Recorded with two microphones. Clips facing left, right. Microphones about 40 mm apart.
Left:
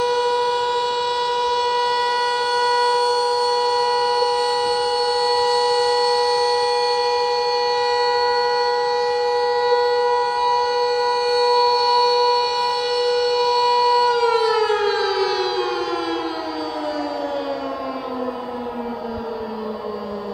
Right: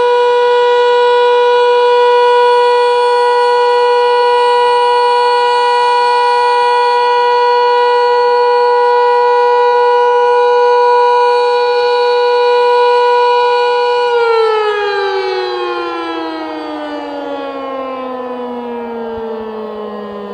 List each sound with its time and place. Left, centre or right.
0.0 s shofar: right